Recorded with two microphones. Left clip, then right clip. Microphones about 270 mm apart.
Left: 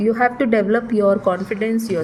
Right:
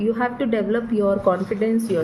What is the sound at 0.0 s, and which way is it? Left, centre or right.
Speech, left.